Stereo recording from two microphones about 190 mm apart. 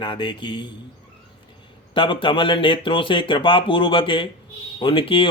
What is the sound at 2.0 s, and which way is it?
Speech, 25° left (ahead or behind).